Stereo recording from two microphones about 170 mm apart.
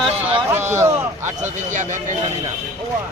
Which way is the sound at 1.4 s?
45° right (ahead or behind).